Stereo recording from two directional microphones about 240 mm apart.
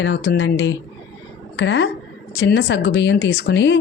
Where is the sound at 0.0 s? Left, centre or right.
Left.